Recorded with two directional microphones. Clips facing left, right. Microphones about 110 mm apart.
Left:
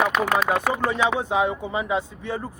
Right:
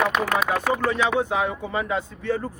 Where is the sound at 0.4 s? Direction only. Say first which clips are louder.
Even; 20° left (ahead or behind).